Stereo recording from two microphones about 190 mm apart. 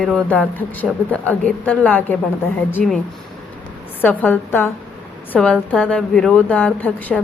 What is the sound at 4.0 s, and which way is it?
A woman's voice, 10° left (ahead or behind).